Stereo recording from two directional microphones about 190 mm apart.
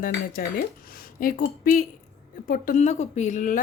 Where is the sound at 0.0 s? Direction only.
45° left (ahead or behind).